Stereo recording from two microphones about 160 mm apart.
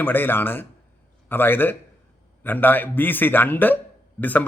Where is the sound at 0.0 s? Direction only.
10° left (ahead or behind).